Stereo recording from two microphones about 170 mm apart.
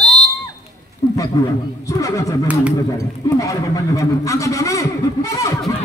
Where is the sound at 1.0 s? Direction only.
15° left (ahead or behind).